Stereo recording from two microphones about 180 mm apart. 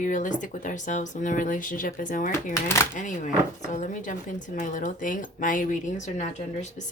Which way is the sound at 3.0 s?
45° left (ahead or behind).